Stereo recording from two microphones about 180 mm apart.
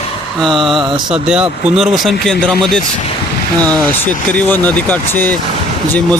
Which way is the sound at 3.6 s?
25° right (ahead or behind).